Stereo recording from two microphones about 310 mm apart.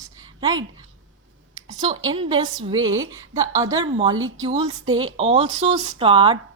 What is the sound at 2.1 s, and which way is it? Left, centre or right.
Speech, centre.